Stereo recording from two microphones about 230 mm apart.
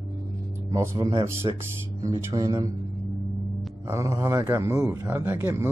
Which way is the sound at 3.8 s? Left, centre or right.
Centre.